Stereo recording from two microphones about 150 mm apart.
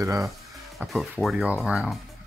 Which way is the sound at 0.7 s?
Centre (ahead or behind).